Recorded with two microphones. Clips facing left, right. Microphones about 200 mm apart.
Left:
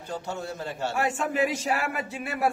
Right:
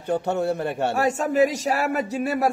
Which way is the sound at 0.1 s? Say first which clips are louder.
Right 11 dB; 60° right (ahead or behind).